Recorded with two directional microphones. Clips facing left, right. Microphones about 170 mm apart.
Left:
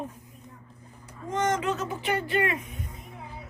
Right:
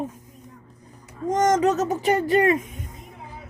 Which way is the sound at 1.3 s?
40° right (ahead or behind).